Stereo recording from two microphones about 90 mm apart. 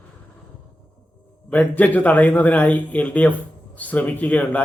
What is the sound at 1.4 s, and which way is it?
Speech, 15° left (ahead or behind).